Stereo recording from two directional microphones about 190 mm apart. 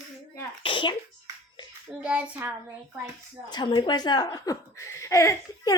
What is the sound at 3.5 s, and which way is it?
Speech, 20° left (ahead or behind).